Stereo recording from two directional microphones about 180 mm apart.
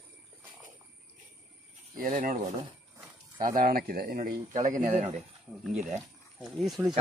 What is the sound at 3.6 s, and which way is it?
Speech, 55° right (ahead or behind).